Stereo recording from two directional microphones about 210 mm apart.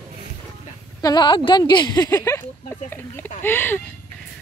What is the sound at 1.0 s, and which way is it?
Speech, 20° left (ahead or behind).